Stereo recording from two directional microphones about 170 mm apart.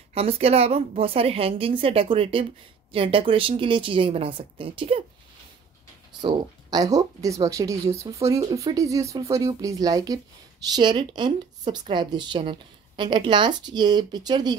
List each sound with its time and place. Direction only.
0.1 s speech: 35° right (ahead or behind)
6.2 s speech: 20° right (ahead or behind)